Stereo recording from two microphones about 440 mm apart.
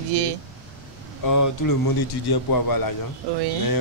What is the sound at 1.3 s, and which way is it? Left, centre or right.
A man's voice, left.